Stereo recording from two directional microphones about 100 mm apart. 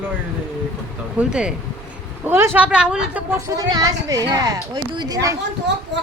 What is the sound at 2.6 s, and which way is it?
Speech, 10° right (ahead or behind).